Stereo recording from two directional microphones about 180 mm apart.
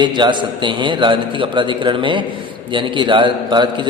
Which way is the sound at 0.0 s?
25° right (ahead or behind).